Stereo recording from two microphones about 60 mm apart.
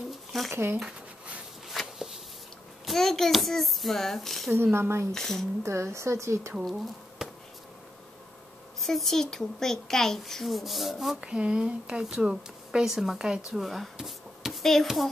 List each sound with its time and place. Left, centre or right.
0.1 s a sound: centre
0.5 s speech: right
1.7 s a sound: centre
2.8 s a child's voice: centre
4.7 s speech: right
5.1 s a child's voice: centre
5.6 s speech: right
7.2 s a sound: centre
8.8 s a child's voice: centre
11.1 s speech: centre